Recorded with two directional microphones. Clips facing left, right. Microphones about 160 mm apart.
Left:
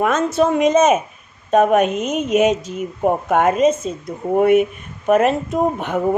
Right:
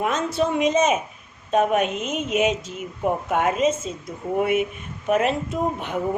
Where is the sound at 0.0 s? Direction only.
45° left (ahead or behind).